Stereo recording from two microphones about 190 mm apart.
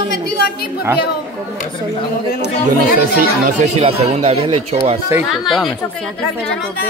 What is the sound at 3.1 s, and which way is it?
A man's voice, 40° right (ahead or behind).